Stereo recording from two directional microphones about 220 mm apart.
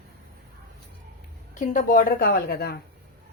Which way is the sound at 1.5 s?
35° left (ahead or behind).